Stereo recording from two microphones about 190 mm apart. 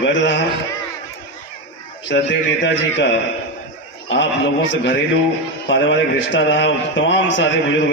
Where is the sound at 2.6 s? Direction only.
70° left (ahead or behind).